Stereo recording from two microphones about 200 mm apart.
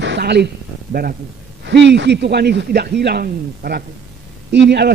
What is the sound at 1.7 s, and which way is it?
A man's voice, 60° right (ahead or behind).